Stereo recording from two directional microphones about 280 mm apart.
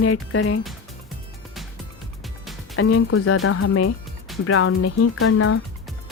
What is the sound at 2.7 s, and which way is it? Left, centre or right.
Speech, left.